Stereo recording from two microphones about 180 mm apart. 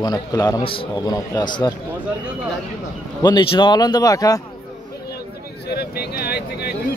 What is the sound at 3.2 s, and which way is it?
A man's voice, 25° left (ahead or behind).